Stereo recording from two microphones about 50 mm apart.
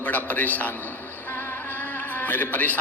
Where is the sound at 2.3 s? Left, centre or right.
Left.